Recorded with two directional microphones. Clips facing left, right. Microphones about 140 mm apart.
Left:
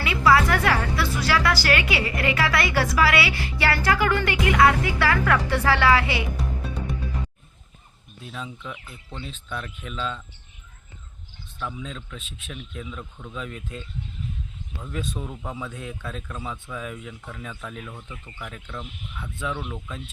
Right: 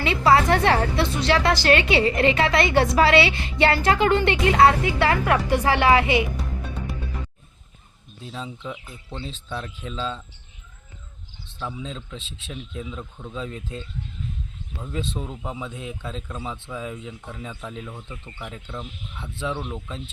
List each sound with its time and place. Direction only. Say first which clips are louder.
0.0 s a woman's voice: right 1 dB; 25° right (ahead or behind)
8.2 s a woman's voice: right 2 dB; 30° right (ahead or behind)
11.6 s a woman's voice: right 1 dB; 25° right (ahead or behind)